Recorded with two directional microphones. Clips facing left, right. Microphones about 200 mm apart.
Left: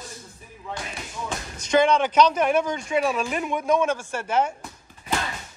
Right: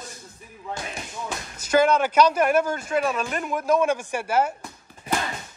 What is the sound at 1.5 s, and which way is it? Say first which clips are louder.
Speech: even; 5° right (ahead or behind).